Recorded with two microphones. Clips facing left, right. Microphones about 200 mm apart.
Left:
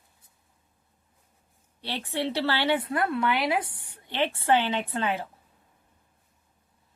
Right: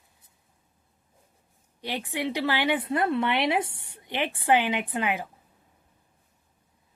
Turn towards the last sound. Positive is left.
turn(degrees=-15)  # may be behind; listen again after turning